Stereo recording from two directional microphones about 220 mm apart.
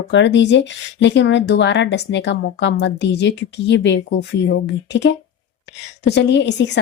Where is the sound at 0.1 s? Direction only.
55° left (ahead or behind).